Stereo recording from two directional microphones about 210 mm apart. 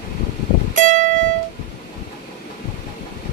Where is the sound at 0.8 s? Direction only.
40° right (ahead or behind).